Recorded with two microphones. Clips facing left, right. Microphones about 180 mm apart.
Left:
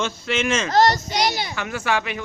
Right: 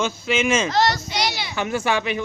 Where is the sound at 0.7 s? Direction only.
45° left (ahead or behind).